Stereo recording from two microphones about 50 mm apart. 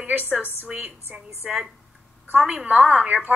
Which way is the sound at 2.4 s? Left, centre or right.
Centre.